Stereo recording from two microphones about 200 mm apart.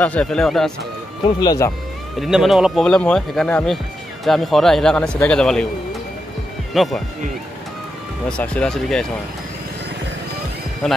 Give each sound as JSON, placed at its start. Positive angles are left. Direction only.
{"t": 0.0, "sound": "speech", "side_deg": 5}
{"t": 1.2, "sound": "speech", "side_deg": 20}
{"t": 2.1, "sound": "speech", "side_deg": 0}
{"t": 6.7, "sound": "speech", "side_deg": 0}
{"t": 8.3, "sound": "speech", "side_deg": 5}